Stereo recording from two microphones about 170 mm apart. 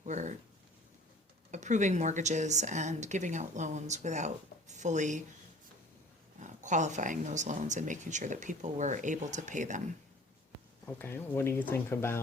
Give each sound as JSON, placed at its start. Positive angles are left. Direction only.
{"t": 0.0, "sound": "a sound", "side_deg": -45}
{"t": 1.5, "sound": "speech", "side_deg": -45}
{"t": 6.4, "sound": "speech", "side_deg": -45}
{"t": 10.8, "sound": "speech", "side_deg": 10}